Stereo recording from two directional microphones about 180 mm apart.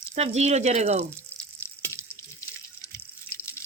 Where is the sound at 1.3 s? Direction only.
10° left (ahead or behind).